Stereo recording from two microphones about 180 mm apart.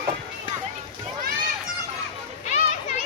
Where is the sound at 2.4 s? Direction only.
40° left (ahead or behind).